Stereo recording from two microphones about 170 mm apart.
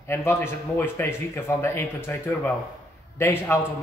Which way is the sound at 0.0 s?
15° left (ahead or behind).